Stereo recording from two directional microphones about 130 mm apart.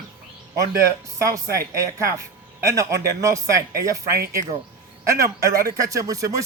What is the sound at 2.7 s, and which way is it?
Speech, 25° right (ahead or behind).